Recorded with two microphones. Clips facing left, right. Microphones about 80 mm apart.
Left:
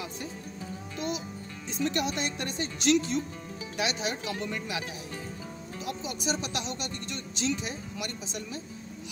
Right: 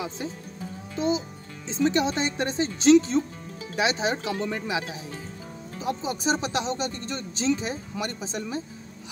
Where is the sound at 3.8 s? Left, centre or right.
Right.